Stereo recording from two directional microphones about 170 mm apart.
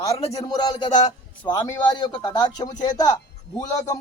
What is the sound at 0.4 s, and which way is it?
A man's voice, 25° left (ahead or behind).